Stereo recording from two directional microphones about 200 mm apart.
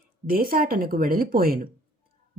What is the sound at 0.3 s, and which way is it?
Speech, 45° right (ahead or behind).